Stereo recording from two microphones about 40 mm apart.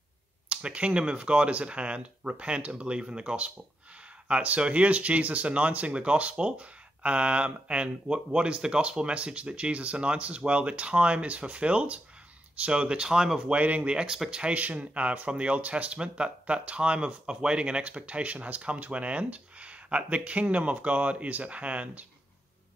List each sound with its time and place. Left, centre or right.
0.5 s speech: right
13.6 s speech: right
14.0 s speech: centre
14.5 s speech: right